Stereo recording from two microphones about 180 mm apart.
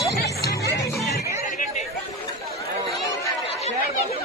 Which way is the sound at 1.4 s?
45° left (ahead or behind).